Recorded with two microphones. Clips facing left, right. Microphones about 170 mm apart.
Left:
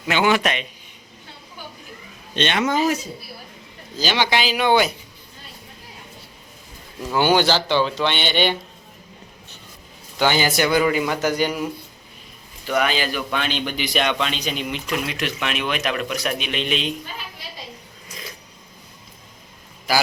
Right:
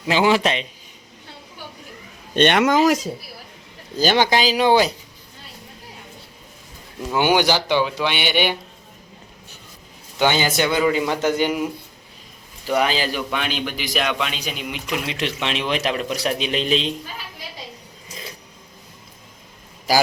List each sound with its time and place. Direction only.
0.1 s a man's voice: 30° right (ahead or behind)
2.3 s speech: 55° right (ahead or behind)
2.6 s speech: 90° right
3.9 s speech: 50° right (ahead or behind); by 4.9 s 30° right (ahead or behind)
7.1 s a man's voice: 15° right (ahead or behind)
10.2 s a man's voice: 20° right (ahead or behind)
12.6 s speech: 30° right (ahead or behind)
13.3 s a man's voice: 10° right (ahead or behind)
15.0 s a man's voice: 25° right (ahead or behind)